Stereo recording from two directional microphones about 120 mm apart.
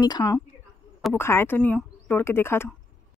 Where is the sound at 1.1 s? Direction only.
20° left (ahead or behind).